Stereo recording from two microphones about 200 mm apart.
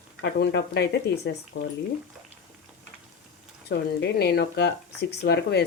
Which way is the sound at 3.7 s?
55° left (ahead or behind).